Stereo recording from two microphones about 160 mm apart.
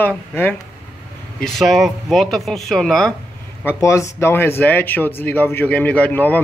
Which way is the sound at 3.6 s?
20° left (ahead or behind).